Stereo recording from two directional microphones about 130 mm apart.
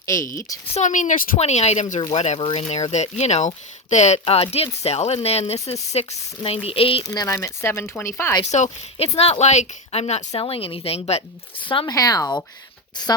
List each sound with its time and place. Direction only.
0.0 s speech: 25° left (ahead or behind)
0.7 s speech: 70° left (ahead or behind); by 1.3 s 85° left
1.4 s speech: 55° left (ahead or behind)
7.0 s speech: 30° left (ahead or behind)
8.4 s speech: 65° left (ahead or behind)
9.1 s speech: 50° left (ahead or behind)
11.9 s speech: 30° left (ahead or behind)